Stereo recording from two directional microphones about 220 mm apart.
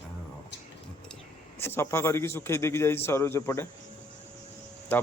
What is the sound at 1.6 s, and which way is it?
Speech, 10° left (ahead or behind).